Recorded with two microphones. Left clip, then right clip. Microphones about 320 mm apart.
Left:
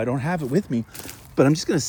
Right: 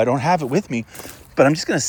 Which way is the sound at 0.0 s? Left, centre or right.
Centre.